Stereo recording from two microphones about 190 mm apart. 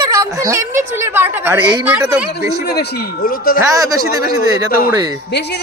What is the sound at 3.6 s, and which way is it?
Speech, 15° right (ahead or behind).